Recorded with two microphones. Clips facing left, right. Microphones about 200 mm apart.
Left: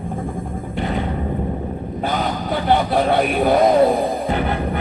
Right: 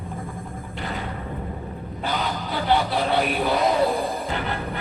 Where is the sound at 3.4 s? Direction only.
50° left (ahead or behind).